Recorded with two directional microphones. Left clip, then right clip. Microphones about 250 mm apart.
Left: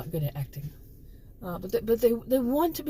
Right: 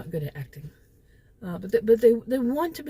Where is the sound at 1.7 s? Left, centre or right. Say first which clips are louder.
Right 6 dB; right.